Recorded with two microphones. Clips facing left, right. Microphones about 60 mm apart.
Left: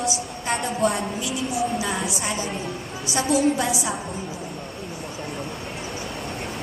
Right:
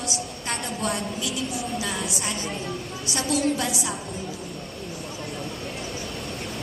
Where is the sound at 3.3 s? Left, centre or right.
Right.